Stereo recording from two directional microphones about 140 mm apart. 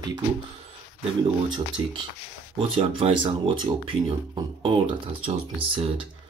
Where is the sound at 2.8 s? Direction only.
40° right (ahead or behind).